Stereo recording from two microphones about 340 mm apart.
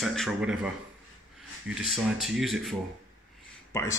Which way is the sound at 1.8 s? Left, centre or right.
Centre.